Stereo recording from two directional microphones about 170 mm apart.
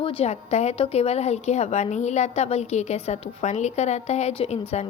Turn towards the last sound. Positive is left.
turn(degrees=40)  # may be behind; listen again after turning